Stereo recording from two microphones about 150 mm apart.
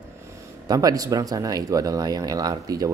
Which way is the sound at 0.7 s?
25° right (ahead or behind).